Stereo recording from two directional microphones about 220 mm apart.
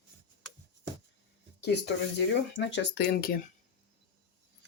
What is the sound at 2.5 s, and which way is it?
Speech, 55° left (ahead or behind).